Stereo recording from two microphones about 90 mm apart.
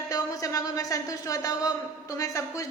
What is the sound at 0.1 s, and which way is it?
Speech, 40° left (ahead or behind).